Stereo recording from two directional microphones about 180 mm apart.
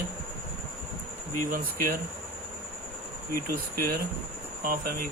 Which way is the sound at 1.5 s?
50° right (ahead or behind).